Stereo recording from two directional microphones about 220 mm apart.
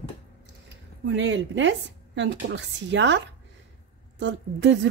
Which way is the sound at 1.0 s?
55° right (ahead or behind).